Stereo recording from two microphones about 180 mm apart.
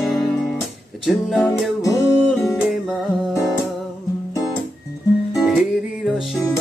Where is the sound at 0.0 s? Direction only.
Centre (ahead or behind).